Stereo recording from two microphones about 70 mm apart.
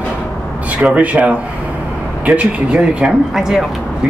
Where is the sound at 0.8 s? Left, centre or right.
Right; by 3.7 s centre.